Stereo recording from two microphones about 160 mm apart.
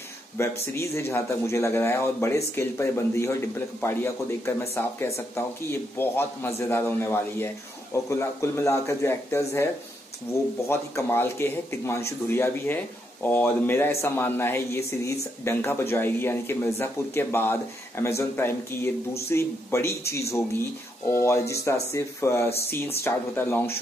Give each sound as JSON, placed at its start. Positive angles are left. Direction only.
{"t": 0.4, "sound": "speech", "side_deg": 15}